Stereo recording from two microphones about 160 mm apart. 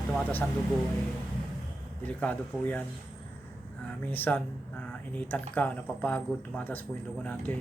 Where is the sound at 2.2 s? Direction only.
10° left (ahead or behind).